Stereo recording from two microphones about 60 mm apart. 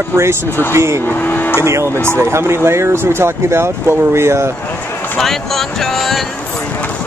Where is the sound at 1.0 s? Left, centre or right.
Left.